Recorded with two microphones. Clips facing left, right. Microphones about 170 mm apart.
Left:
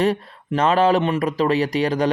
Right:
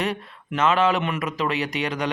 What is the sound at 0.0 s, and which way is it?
Speech, 35° left (ahead or behind).